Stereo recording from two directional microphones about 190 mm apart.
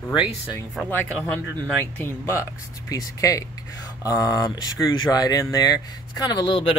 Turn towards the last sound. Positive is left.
turn(degrees=25)  # may be behind; listen again after turning